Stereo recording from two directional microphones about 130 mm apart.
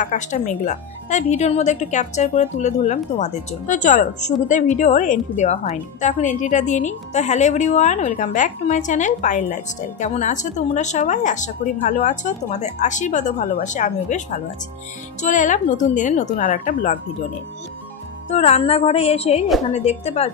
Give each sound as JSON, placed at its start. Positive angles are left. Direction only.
{"t": 0.0, "sound": "a woman's voice", "side_deg": 75}
{"t": 15.2, "sound": "speech", "side_deg": 75}
{"t": 18.3, "sound": "a woman's voice", "side_deg": 55}